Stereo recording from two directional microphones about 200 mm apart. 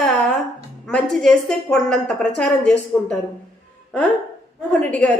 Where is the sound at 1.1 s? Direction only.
5° left (ahead or behind).